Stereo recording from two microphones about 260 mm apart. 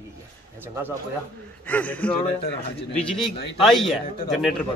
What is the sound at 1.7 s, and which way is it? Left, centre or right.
A man's voice, centre.